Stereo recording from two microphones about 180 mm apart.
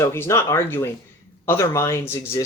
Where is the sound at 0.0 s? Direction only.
15° left (ahead or behind).